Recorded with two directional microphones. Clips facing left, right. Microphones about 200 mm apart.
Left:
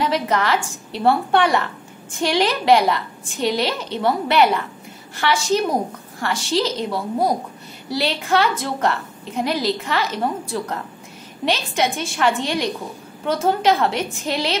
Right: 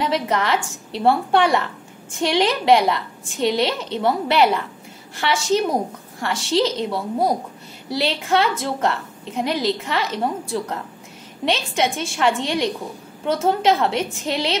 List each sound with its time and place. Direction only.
0.0 s a woman's voice: 25° right (ahead or behind)